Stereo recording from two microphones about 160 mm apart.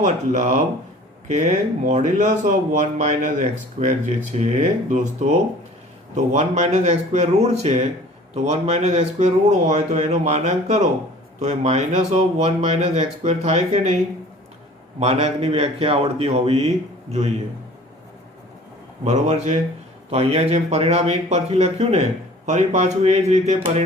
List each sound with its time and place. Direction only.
0.0 s speech: 50° right (ahead or behind)
19.0 s speech: 45° right (ahead or behind)